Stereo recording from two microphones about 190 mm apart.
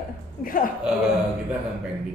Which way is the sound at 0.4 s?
45° left (ahead or behind).